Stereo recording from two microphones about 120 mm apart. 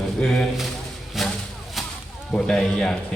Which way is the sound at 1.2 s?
Centre (ahead or behind).